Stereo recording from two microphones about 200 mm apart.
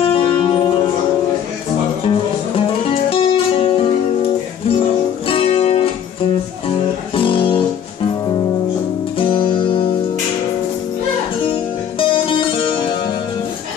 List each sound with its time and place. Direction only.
0.0 s music: 25° left (ahead or behind)
3.1 s music: 25° left (ahead or behind)
7.2 s guitar: 25° left (ahead or behind)
9.2 s music: 25° left (ahead or behind)
12.0 s music: 25° left (ahead or behind)